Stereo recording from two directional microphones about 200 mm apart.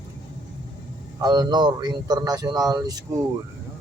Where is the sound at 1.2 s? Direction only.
20° right (ahead or behind).